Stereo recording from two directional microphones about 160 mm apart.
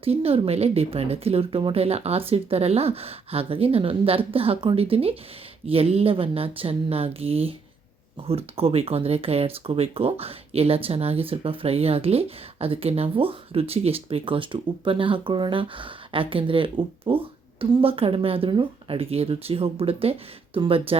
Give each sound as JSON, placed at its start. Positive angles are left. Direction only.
{"t": 0.0, "sound": "speech", "side_deg": -40}